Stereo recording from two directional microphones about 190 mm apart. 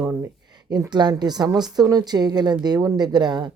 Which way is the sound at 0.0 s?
15° right (ahead or behind).